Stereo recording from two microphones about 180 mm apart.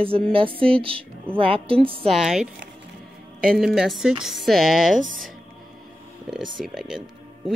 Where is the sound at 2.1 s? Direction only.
Centre (ahead or behind).